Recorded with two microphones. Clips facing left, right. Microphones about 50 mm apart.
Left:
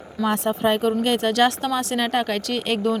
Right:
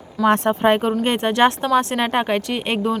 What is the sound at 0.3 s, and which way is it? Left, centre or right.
Speech, right.